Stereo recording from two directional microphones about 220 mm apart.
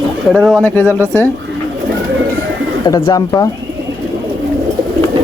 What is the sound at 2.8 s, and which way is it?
Speech, 15° left (ahead or behind).